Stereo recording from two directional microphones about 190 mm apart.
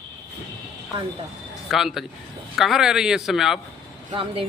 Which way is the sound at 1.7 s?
Centre (ahead or behind).